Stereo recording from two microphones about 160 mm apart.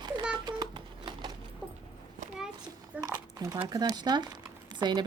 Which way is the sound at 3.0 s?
25° right (ahead or behind).